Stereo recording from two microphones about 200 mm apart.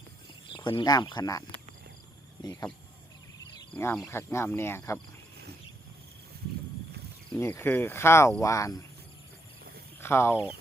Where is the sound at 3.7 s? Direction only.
10° left (ahead or behind).